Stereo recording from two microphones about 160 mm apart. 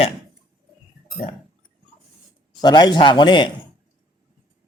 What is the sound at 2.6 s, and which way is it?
Speech, 25° left (ahead or behind).